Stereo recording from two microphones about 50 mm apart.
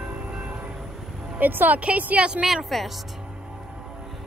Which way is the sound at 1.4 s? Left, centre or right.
Right.